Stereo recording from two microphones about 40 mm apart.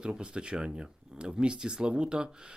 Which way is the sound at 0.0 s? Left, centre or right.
Right.